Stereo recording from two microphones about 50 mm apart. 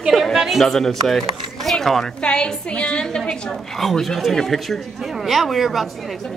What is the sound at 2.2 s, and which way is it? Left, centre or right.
A woman's voice, left.